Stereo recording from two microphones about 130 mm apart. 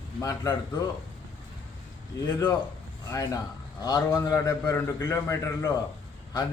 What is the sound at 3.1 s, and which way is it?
A man's voice, 30° left (ahead or behind).